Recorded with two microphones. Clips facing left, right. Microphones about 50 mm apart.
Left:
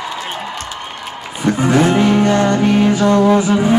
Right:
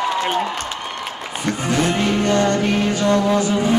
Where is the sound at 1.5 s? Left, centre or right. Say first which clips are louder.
Left 7 dB; centre.